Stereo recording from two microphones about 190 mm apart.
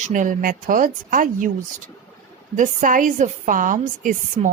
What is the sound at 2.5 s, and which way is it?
A woman's voice, 40° right (ahead or behind).